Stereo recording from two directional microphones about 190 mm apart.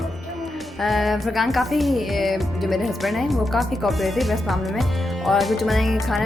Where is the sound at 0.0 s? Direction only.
Centre (ahead or behind).